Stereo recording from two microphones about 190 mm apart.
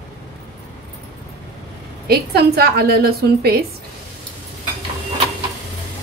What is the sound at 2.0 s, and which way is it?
A woman's voice, 55° right (ahead or behind).